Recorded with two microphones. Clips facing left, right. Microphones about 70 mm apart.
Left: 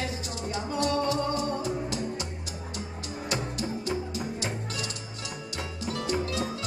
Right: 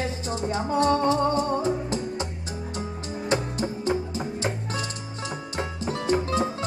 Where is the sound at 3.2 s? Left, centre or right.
Right.